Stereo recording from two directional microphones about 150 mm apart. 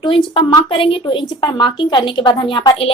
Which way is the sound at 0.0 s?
35° left (ahead or behind).